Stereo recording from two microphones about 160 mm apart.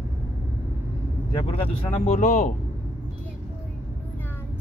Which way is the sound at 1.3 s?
35° left (ahead or behind).